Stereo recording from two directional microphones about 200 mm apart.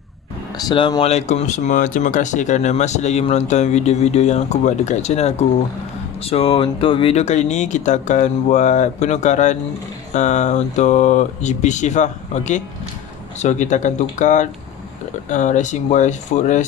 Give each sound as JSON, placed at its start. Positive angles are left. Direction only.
{"t": 0.6, "sound": "speech", "side_deg": 20}